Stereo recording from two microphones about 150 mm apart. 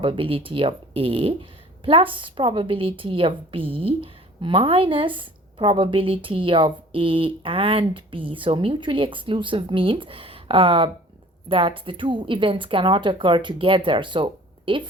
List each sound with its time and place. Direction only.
0.0 s speech: 35° right (ahead or behind)